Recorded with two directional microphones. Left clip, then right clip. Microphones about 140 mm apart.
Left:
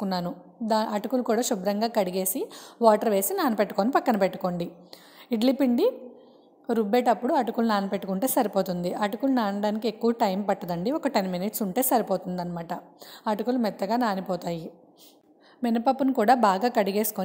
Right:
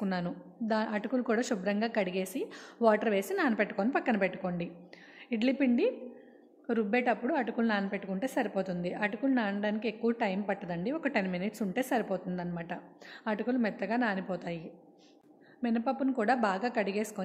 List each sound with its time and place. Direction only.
0.0 s a woman's voice: 30° left (ahead or behind)
15.6 s a woman's voice: 50° left (ahead or behind)